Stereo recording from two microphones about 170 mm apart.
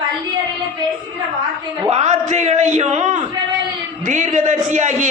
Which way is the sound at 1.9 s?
40° right (ahead or behind).